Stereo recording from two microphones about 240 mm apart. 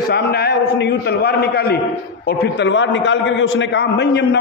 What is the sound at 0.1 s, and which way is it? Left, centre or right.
A man's voice, left.